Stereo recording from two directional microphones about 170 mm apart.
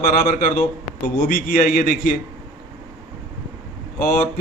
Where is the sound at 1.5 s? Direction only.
55° left (ahead or behind).